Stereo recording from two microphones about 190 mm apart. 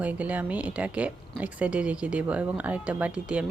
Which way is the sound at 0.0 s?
5° right (ahead or behind).